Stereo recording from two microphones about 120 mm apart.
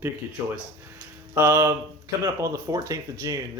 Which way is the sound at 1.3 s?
25° right (ahead or behind).